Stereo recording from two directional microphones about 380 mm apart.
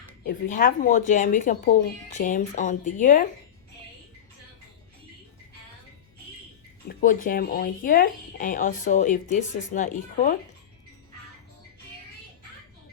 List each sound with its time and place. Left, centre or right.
0.3 s speech: left
6.8 s speech: left